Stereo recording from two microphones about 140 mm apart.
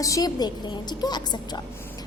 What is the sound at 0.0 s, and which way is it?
A woman's voice, 25° left (ahead or behind).